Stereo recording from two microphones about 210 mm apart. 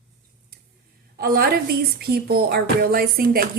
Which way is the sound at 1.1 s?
45° right (ahead or behind).